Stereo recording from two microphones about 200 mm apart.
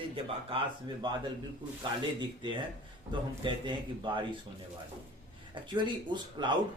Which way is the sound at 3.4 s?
25° right (ahead or behind).